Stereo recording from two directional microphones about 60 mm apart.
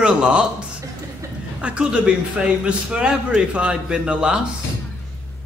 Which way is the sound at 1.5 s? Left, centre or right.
Centre.